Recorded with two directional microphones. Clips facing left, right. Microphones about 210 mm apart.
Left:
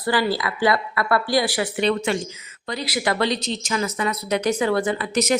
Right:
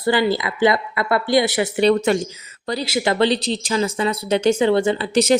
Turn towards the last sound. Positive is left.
turn(degrees=-30)  # may be behind; listen again after turning